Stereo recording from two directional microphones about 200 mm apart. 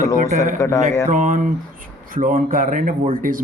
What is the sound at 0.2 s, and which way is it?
Speech, 35° right (ahead or behind).